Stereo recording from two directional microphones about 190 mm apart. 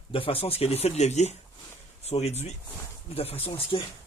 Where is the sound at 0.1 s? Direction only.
30° left (ahead or behind).